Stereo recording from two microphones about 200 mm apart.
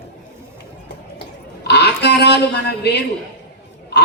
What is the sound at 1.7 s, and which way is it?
Speech, 55° left (ahead or behind).